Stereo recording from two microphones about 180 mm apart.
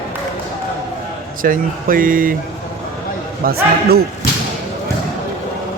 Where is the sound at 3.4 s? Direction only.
60° right (ahead or behind).